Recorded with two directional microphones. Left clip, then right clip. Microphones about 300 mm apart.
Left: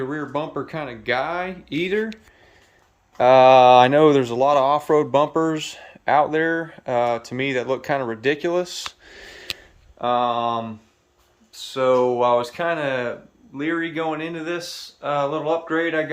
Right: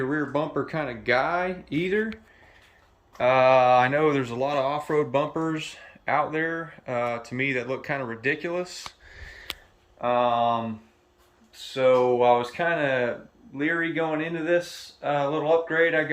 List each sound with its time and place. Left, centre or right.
0.0 s speech: centre
3.2 s speech: centre
11.7 s speech: centre